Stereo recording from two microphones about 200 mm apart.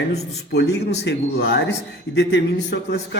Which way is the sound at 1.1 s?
60° left (ahead or behind).